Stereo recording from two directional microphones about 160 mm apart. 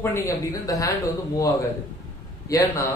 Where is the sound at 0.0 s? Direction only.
15° left (ahead or behind).